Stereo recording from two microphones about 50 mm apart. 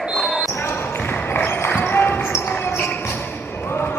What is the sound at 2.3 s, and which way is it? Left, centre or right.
Basketball bounce, left.